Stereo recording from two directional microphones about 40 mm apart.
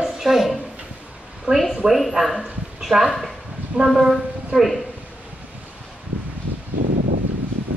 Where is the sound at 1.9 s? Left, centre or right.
Centre.